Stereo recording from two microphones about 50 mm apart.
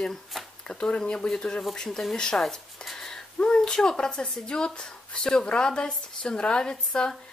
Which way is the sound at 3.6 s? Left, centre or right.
Centre.